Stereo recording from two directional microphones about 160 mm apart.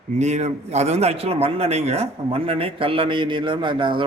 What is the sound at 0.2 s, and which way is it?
A man's voice, 45° right (ahead or behind).